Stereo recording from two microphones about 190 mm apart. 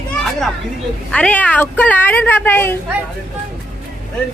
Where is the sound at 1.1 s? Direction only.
5° left (ahead or behind).